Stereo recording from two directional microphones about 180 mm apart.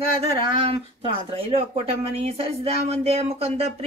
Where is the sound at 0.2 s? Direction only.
35° right (ahead or behind).